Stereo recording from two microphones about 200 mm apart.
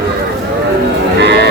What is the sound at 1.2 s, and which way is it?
Music, 60° right (ahead or behind).